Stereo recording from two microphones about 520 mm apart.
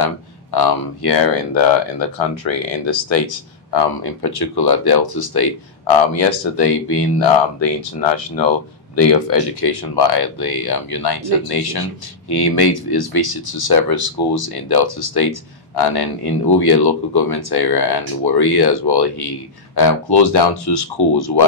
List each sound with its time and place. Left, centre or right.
0.0 s speech: left
5.9 s speech: left
8.9 s speech: left